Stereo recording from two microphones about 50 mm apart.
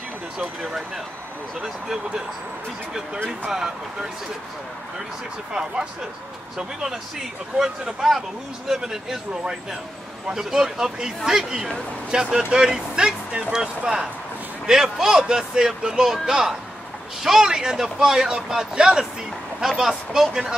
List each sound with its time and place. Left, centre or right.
1.6 s speech: centre
3.4 s speech: centre
5.5 s speech: centre
10.3 s speech: centre